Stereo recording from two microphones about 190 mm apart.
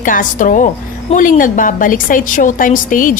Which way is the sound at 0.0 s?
45° left (ahead or behind).